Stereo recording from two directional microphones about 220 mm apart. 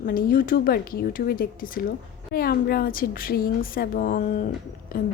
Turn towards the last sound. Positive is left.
turn(degrees=40)  # may be behind; listen again after turning